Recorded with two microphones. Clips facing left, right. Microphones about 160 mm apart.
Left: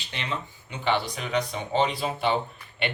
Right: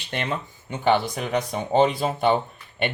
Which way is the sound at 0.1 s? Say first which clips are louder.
Right 5 dB; 50° right (ahead or behind).